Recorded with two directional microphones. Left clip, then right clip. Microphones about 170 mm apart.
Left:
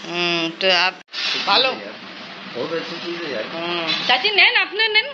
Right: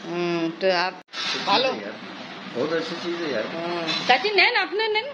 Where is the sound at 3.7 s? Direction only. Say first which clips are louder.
Left 2 dB; 5° right (ahead or behind).